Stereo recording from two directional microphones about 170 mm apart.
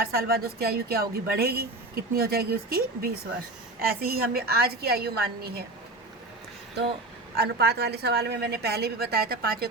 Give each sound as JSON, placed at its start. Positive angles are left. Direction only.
{"t": 0.0, "sound": "a woman's voice", "side_deg": -60}
{"t": 7.3, "sound": "a woman's voice", "side_deg": -70}